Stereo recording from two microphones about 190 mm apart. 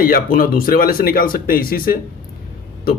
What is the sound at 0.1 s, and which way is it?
A man's voice, 50° left (ahead or behind).